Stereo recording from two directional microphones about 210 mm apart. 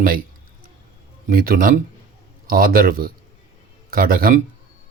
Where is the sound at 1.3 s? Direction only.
40° right (ahead or behind).